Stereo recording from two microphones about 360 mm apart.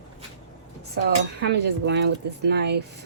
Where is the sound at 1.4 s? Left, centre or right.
Right.